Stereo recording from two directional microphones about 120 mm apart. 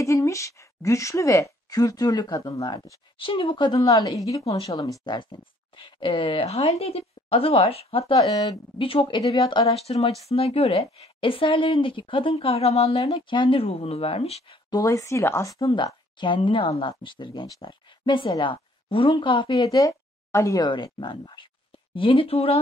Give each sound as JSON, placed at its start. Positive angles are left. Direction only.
{"t": 0.0, "sound": "a woman's voice", "side_deg": 25}
{"t": 5.0, "sound": "speech", "side_deg": 40}
{"t": 8.2, "sound": "speech", "side_deg": 35}
{"t": 14.7, "sound": "a woman's voice", "side_deg": 30}
{"t": 15.7, "sound": "speech", "side_deg": 40}
{"t": 20.6, "sound": "speech", "side_deg": 40}